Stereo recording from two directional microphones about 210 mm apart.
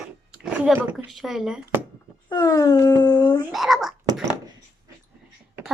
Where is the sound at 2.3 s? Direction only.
15° left (ahead or behind).